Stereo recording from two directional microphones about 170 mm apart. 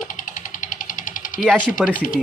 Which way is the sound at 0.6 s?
50° left (ahead or behind).